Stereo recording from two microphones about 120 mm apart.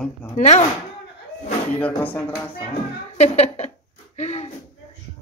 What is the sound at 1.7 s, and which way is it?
Speech, 15° left (ahead or behind).